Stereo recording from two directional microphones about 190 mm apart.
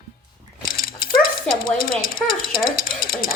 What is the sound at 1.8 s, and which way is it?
Speech, 50° left (ahead or behind).